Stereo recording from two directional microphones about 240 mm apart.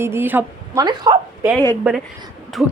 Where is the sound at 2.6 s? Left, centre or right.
Centre.